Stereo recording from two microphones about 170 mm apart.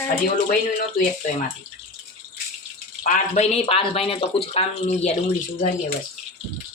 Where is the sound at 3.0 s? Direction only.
45° left (ahead or behind).